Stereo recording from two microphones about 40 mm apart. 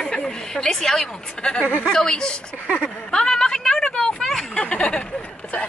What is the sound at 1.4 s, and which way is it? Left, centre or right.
Speech, left.